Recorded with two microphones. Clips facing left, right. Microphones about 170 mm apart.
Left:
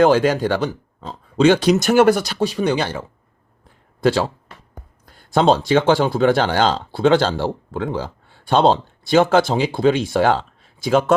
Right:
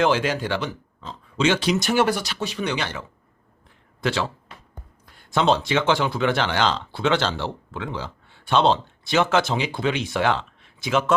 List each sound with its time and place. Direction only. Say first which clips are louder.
0.0 s speech: left 7 dB; 40° left (ahead or behind)
5.0 s a sound: left 5 dB; 40° left (ahead or behind)
5.8 s speech: left 6 dB; 35° left (ahead or behind)